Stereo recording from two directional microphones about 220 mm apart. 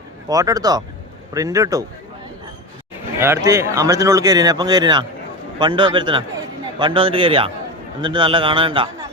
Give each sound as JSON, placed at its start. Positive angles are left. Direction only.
{"t": 0.3, "sound": "speech", "side_deg": -15}
{"t": 3.2, "sound": "a man's voice", "side_deg": -10}